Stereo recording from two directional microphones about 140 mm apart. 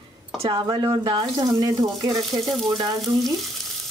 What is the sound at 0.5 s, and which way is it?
Speech, 30° right (ahead or behind).